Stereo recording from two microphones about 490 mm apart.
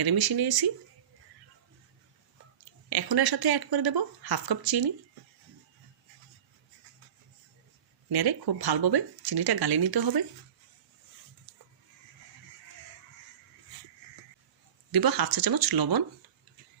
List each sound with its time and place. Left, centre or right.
0.0 s speech: right
2.9 s speech: right
8.1 s speech: right
11.5 s a sound: right
14.9 s speech: right